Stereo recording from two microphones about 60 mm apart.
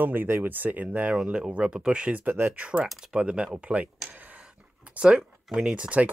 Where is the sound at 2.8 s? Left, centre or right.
Centre.